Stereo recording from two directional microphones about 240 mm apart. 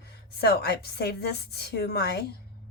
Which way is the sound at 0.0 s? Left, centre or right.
Left.